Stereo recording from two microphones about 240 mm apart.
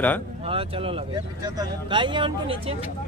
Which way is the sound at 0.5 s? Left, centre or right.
Right.